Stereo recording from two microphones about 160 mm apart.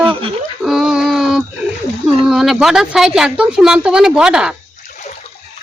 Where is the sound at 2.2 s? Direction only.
Centre (ahead or behind).